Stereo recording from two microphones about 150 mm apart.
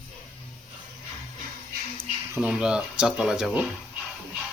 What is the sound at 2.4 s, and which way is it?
Speech, 5° right (ahead or behind).